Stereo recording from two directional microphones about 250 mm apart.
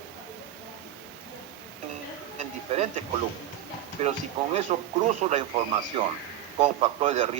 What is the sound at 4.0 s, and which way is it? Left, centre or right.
A man's voice, right.